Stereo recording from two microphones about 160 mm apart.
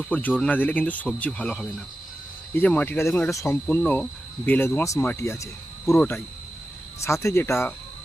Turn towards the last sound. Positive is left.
turn(degrees=15)  # may be behind; listen again after turning